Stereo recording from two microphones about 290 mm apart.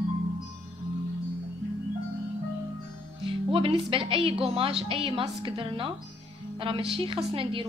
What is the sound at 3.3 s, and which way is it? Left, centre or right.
A woman's voice, centre.